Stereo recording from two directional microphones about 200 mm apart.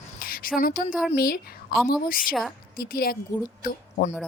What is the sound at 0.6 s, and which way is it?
Speech, 45° left (ahead or behind).